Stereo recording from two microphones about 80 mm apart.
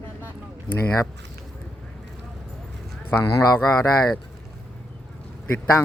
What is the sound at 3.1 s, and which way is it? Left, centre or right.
Speech, left.